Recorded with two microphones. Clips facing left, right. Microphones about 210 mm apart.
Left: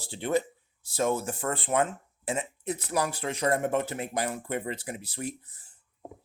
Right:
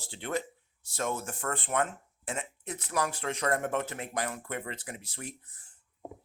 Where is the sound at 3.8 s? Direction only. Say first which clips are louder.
Left 4 dB; 35° left (ahead or behind).